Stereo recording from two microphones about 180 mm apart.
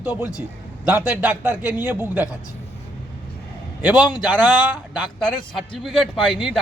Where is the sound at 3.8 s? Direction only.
5° right (ahead or behind).